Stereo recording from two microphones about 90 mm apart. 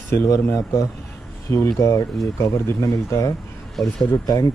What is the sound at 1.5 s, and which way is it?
Speech, 35° left (ahead or behind).